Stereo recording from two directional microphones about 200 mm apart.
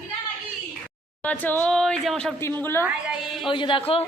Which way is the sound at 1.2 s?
10° left (ahead or behind).